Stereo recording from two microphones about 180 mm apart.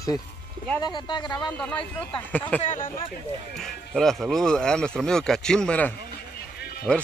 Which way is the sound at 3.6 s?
Centre (ahead or behind).